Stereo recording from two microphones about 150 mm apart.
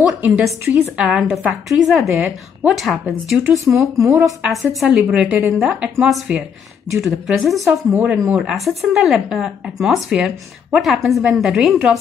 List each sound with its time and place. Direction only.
0.2 s speech: 10° right (ahead or behind)
3.7 s speech: 20° right (ahead or behind)
4.2 s a woman's voice: centre (ahead or behind)